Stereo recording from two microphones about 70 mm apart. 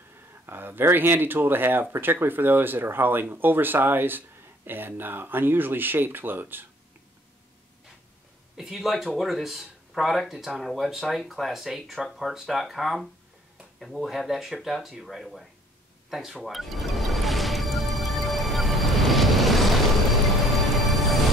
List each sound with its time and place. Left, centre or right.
0.5 s speech: right
8.5 s speech: centre
16.4 s music: centre